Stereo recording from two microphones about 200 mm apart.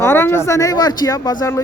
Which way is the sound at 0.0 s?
10° left (ahead or behind).